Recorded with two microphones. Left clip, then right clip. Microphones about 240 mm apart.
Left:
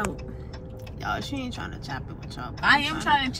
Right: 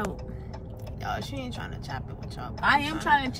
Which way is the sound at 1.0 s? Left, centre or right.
Centre.